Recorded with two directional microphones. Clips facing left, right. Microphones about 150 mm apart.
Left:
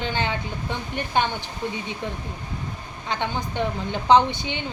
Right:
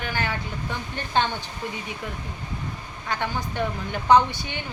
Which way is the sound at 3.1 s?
20° left (ahead or behind).